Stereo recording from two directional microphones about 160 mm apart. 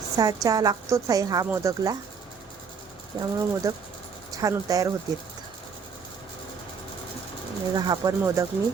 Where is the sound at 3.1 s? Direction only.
25° right (ahead or behind).